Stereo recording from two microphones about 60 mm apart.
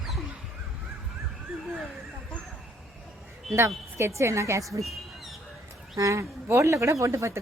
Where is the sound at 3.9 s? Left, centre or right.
Right.